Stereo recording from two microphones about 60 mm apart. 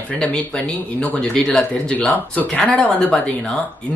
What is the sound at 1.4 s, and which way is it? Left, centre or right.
Speech, centre.